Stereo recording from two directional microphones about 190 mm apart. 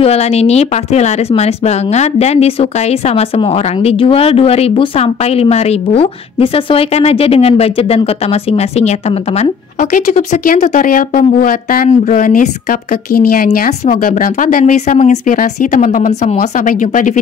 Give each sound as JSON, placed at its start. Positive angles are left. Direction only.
{"t": 0.0, "sound": "speech", "side_deg": 35}